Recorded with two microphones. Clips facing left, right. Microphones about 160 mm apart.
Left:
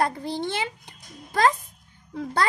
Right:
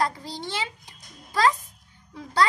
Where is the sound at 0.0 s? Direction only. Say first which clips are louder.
Left 3 dB; 55° left (ahead or behind).